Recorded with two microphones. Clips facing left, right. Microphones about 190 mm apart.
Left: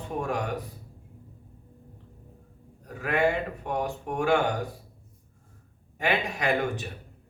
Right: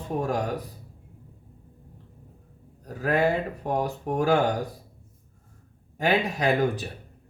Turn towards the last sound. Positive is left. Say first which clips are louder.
# right 3 dB
turn(degrees=-35)  # may be behind; listen again after turning